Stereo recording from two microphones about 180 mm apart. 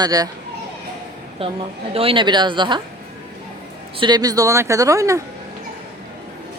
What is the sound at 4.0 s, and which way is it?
Speech, 20° right (ahead or behind).